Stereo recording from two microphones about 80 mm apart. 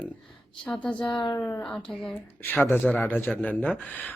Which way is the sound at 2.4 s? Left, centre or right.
Left.